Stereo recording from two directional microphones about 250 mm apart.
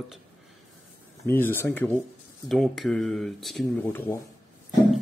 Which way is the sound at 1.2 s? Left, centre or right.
Centre.